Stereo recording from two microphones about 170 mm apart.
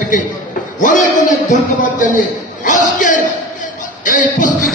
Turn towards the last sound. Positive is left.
turn(degrees=50)  # may be behind; listen again after turning